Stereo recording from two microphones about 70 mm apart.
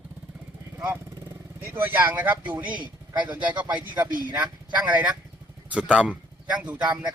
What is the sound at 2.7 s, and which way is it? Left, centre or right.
Speech, right.